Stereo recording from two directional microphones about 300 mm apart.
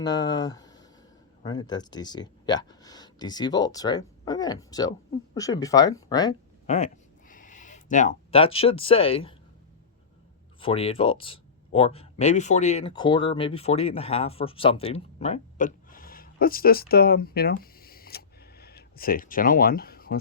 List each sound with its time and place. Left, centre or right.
0.0 s speech: centre
10.6 s speech: centre